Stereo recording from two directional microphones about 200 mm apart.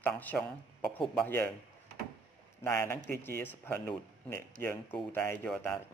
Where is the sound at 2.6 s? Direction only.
10° left (ahead or behind).